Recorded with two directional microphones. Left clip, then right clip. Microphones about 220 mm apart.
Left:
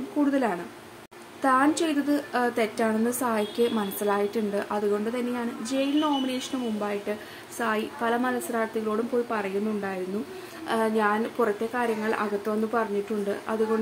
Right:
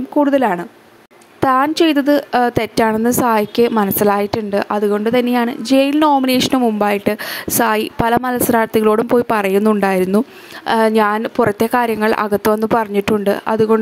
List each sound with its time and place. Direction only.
0.2 s a woman's voice: 40° right (ahead or behind)